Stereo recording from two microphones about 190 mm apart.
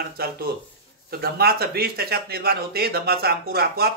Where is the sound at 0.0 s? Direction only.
55° right (ahead or behind).